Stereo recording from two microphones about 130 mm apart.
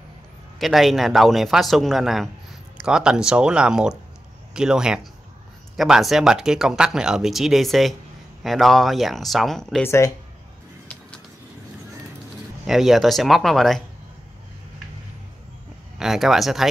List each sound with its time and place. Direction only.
0.6 s speech: centre (ahead or behind)
9.8 s speech: 20° left (ahead or behind)
12.6 s speech: centre (ahead or behind)
16.0 s speech: 5° right (ahead or behind)